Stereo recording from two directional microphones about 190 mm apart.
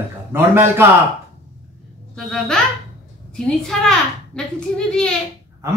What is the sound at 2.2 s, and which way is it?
A woman's voice, 5° left (ahead or behind).